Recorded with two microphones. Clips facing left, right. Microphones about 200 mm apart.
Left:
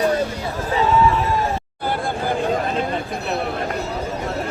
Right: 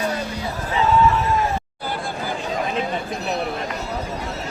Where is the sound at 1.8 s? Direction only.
55° left (ahead or behind).